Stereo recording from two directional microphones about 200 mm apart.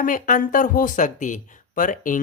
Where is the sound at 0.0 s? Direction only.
40° left (ahead or behind).